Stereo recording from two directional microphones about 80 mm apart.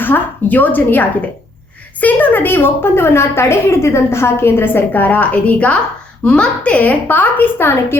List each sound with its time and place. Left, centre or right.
0.0 s a woman's voice: left